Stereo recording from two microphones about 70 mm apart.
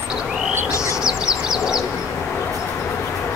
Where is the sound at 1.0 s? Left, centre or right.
Centre.